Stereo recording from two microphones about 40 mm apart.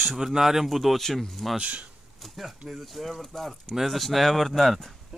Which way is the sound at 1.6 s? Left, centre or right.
Right.